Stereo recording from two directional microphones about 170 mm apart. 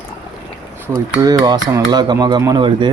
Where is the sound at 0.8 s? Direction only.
20° right (ahead or behind).